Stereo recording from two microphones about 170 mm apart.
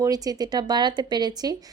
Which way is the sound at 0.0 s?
20° right (ahead or behind).